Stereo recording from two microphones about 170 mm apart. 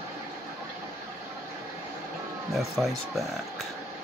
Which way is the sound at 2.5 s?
Centre (ahead or behind).